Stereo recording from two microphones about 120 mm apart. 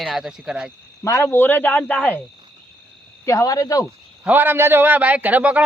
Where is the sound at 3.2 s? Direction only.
30° left (ahead or behind).